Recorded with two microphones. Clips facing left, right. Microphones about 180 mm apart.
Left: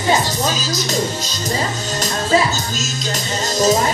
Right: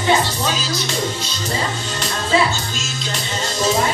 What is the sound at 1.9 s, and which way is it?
Music, 40° left (ahead or behind).